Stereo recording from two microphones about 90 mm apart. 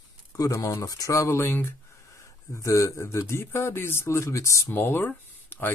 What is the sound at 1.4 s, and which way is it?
Speech, 25° left (ahead or behind).